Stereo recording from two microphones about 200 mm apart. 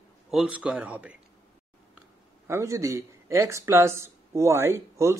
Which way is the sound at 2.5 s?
15° right (ahead or behind).